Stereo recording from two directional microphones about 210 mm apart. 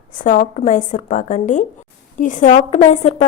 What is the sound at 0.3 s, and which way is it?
A woman's voice, 35° left (ahead or behind).